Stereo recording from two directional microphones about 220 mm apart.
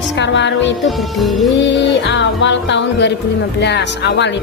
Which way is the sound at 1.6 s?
55° left (ahead or behind).